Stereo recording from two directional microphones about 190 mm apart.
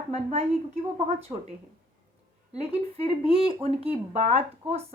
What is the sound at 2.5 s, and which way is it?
Speech, 30° right (ahead or behind).